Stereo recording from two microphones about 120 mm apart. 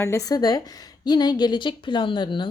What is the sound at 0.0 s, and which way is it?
A woman's voice, 25° left (ahead or behind).